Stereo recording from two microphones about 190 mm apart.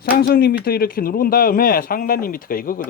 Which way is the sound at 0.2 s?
55° left (ahead or behind).